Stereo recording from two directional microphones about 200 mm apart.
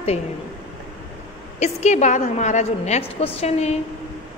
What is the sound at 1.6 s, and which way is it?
A woman's voice, 35° left (ahead or behind).